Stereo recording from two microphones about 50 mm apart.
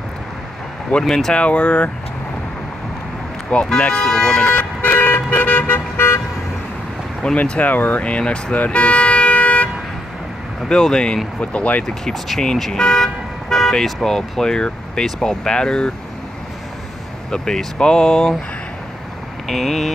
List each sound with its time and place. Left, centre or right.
1.0 s speech: centre
1.3 s speech: left
3.5 s speech: left
4.1 s speech: centre
4.5 s vehicle: left
7.4 s speech: left
8.0 s speech: left
8.5 s toot: left
10.7 s speech: centre
11.8 s speech: centre
12.8 s car alarm: centre
14.0 s speech: centre
17.3 s speech: centre
19.4 s speech: centre